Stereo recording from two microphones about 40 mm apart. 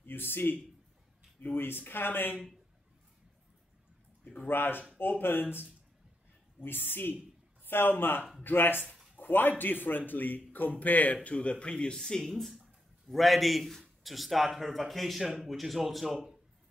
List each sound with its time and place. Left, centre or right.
0.0 s speech: left
4.5 s speech: left
6.6 s speech: left
8.9 s a sound: centre
9.2 s speech: left
11.2 s speech: left
12.0 s speech: centre